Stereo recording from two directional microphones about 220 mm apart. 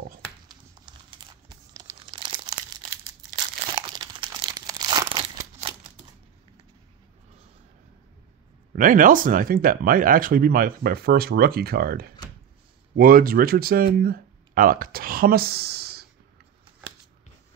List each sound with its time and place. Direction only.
0.5 s crumpling: 20° right (ahead or behind)
3.7 s crumpling: 20° right (ahead or behind)
8.7 s speech: 35° right (ahead or behind)